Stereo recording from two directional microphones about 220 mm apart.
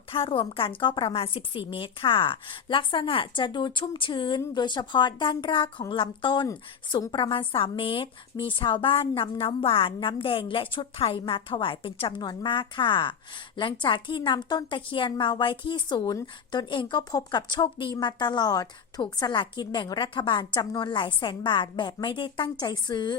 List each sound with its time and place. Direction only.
0.1 s a woman's voice: 25° left (ahead or behind)